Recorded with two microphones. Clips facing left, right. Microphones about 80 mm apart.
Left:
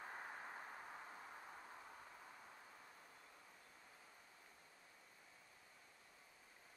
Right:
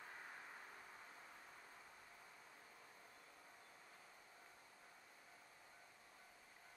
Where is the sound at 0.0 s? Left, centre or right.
Left.